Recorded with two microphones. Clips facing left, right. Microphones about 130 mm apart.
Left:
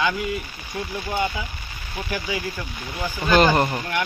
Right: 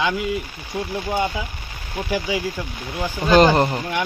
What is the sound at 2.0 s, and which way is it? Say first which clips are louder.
Speech: right 5 dB; 15° right (ahead or behind).